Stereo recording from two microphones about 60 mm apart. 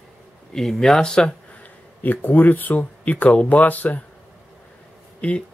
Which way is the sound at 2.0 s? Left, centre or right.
Left.